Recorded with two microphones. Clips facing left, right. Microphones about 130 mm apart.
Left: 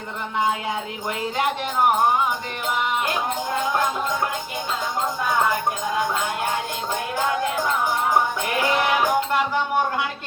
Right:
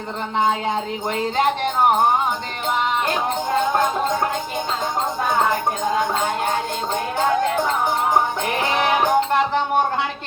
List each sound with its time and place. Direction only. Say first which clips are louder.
3.7 s music: right 3 dB; 35° right (ahead or behind)
5.8 s speech: right 3 dB; 30° right (ahead or behind)
8.4 s music: right 1 dB; 30° right (ahead or behind)